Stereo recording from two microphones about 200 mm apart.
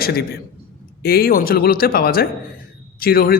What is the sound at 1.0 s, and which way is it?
A man's voice, 50° left (ahead or behind).